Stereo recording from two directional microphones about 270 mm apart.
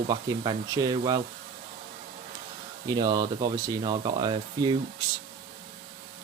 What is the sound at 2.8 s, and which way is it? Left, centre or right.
Speech, centre.